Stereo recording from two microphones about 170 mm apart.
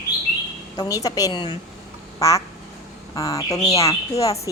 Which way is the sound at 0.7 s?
20° left (ahead or behind).